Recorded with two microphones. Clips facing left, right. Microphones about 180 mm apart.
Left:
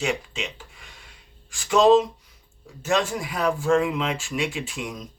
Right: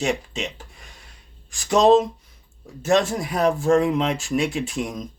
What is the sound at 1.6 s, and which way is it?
Speech, 40° right (ahead or behind).